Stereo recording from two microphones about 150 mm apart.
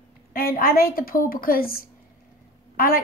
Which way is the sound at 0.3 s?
75° left (ahead or behind).